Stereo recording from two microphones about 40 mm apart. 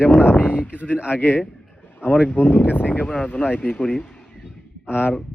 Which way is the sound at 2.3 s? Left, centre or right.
Left.